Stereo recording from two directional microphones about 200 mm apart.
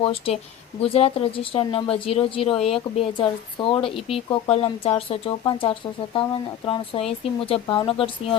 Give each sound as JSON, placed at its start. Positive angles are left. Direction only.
{"t": 0.0, "sound": "speech", "side_deg": 30}